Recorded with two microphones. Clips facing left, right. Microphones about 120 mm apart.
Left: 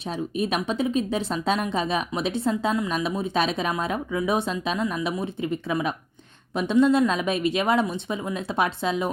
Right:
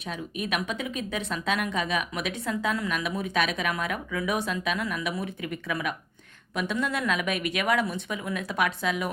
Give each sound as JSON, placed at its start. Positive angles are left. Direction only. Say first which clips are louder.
{"t": 0.0, "sound": "speech", "louder": "left 6 dB", "side_deg": 30}